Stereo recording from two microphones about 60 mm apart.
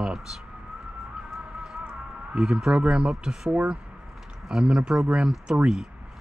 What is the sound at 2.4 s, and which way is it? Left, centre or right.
Speech, centre.